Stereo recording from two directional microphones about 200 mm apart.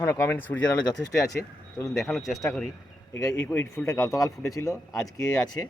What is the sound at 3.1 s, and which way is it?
Speech, 15° left (ahead or behind).